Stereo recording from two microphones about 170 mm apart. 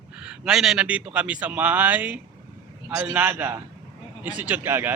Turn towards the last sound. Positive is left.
turn(degrees=-10)  # may be behind; listen again after turning